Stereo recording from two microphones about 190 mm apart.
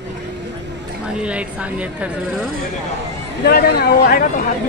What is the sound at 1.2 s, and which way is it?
Speech, 5° right (ahead or behind).